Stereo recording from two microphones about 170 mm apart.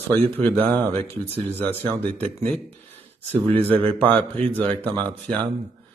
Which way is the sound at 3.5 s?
10° left (ahead or behind).